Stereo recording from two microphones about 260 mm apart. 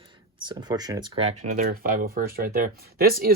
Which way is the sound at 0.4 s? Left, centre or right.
Centre.